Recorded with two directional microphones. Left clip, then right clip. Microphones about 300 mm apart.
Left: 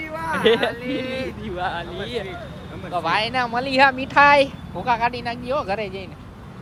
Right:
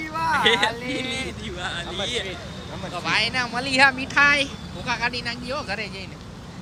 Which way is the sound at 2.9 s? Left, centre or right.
Centre.